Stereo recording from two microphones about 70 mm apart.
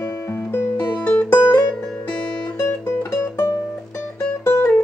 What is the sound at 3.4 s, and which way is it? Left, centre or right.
Music, left.